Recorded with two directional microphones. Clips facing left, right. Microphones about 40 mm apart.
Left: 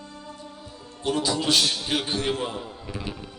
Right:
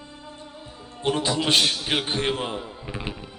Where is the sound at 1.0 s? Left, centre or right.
Right.